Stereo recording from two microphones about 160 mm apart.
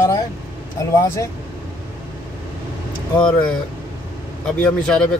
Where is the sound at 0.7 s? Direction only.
20° left (ahead or behind).